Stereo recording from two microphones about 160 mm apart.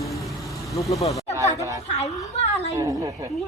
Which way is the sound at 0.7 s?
20° left (ahead or behind).